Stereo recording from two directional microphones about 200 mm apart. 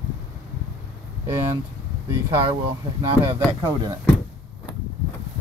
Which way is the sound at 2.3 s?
15° right (ahead or behind).